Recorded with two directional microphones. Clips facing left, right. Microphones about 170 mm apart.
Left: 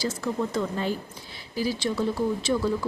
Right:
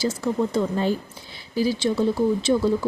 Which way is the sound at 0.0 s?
25° right (ahead or behind).